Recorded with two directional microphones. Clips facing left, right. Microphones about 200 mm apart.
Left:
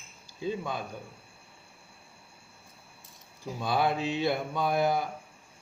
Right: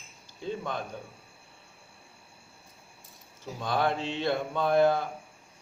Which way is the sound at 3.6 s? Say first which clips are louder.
Left 1 dB; 10° left (ahead or behind).